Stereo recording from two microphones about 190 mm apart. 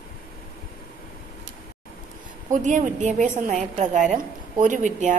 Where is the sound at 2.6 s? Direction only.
40° right (ahead or behind).